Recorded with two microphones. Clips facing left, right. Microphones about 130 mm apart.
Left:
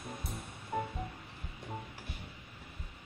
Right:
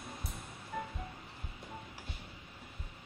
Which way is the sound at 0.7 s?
45° left (ahead or behind).